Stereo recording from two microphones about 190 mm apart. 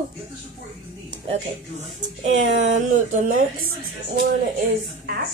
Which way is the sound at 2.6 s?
40° right (ahead or behind).